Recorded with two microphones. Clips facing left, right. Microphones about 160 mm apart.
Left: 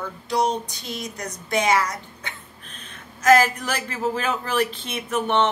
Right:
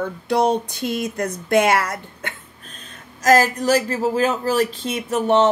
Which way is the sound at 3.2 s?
35° right (ahead or behind).